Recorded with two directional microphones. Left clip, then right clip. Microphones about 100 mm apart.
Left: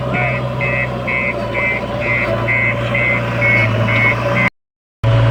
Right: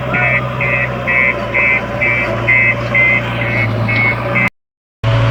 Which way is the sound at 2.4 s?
15° right (ahead or behind).